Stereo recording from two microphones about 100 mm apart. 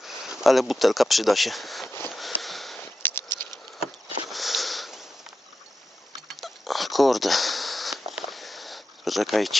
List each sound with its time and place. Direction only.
0.0 s speech: 5° right (ahead or behind)
1.9 s sniff: 25° left (ahead or behind)
2.4 s sniff: centre (ahead or behind)
2.8 s a sound: 20° left (ahead or behind)
4.3 s sniff: centre (ahead or behind)
6.2 s a sound: centre (ahead or behind)